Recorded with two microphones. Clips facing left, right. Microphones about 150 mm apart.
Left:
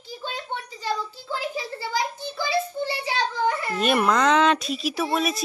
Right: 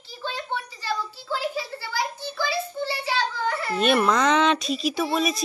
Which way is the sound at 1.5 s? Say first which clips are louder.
Left 2 dB; 20° left (ahead or behind).